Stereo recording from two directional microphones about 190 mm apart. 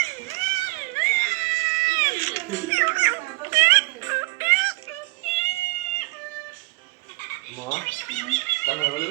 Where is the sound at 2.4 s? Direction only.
15° right (ahead or behind).